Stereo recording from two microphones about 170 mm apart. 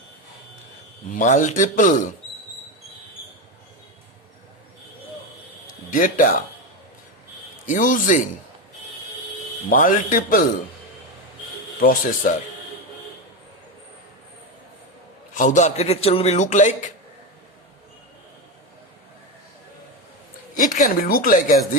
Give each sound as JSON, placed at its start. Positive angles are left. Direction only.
{"t": 1.1, "sound": "a man's voice", "side_deg": 50}
{"t": 5.6, "sound": "a sound", "side_deg": 50}
{"t": 7.7, "sound": "a man's voice", "side_deg": 50}
{"t": 9.6, "sound": "a man's voice", "side_deg": 50}
{"t": 11.8, "sound": "speech", "side_deg": 55}
{"t": 15.4, "sound": "a man's voice", "side_deg": 45}
{"t": 20.6, "sound": "a man's voice", "side_deg": 50}